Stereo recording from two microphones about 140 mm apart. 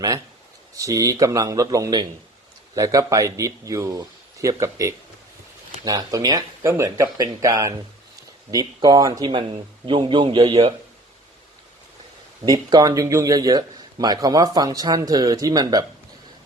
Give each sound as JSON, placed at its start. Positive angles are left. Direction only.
{"t": 0.8, "sound": "speech", "side_deg": -25}
{"t": 12.5, "sound": "speech", "side_deg": -25}